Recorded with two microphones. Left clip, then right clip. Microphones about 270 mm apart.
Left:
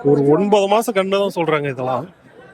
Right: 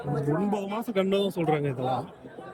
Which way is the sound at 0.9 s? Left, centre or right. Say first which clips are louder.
Left 9 dB; centre.